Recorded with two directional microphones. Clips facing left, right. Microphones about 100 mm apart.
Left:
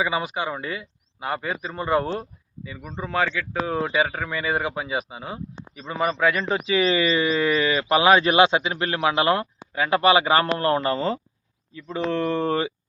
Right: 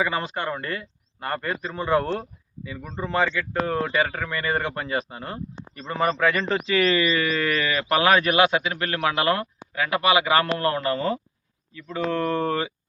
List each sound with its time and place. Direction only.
0.0 s speech: 10° left (ahead or behind)
6.7 s speech: 15° left (ahead or behind)